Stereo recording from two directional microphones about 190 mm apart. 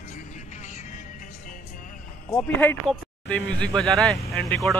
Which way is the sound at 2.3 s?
5° left (ahead or behind).